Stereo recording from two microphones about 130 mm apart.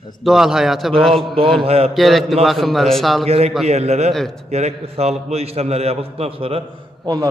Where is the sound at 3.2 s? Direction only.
50° right (ahead or behind).